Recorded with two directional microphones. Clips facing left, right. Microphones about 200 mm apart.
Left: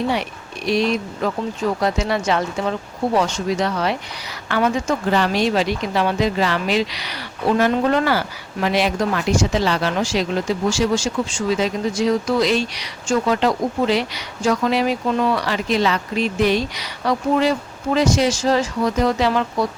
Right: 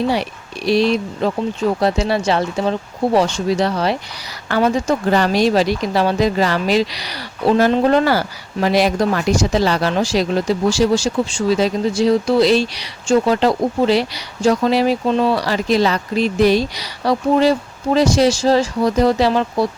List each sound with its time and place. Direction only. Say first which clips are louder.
0.1 s speech: right 3 dB; 35° right (ahead or behind)